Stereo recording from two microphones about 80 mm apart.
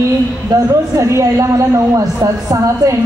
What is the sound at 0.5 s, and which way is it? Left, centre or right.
Speech, right.